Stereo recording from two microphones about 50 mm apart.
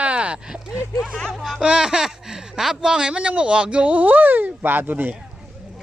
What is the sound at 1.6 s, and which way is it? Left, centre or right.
Speech, centre.